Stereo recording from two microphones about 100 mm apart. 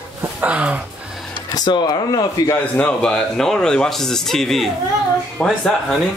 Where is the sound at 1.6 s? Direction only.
45° left (ahead or behind).